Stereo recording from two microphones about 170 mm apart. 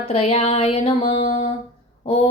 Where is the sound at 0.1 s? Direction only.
35° left (ahead or behind).